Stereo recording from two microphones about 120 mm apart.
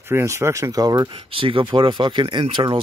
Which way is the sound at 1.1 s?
50° right (ahead or behind).